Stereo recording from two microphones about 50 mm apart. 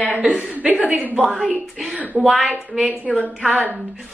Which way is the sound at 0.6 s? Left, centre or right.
Right.